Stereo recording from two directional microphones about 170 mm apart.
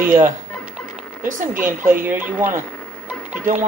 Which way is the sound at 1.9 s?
10° right (ahead or behind).